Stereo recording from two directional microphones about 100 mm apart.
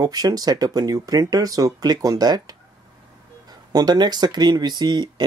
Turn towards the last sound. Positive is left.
turn(degrees=-45)  # may be behind; listen again after turning